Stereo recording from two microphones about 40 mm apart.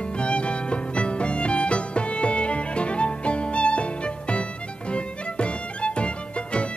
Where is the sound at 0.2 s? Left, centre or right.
Left.